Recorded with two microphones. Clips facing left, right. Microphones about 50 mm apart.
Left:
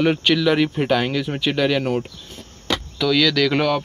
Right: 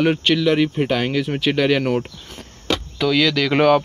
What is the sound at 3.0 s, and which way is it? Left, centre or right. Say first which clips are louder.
Speech: even; centre.